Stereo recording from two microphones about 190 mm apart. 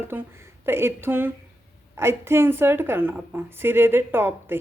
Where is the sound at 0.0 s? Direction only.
10° right (ahead or behind).